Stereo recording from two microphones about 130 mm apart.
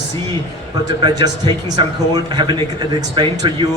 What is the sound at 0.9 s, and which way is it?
A man's voice, 30° right (ahead or behind).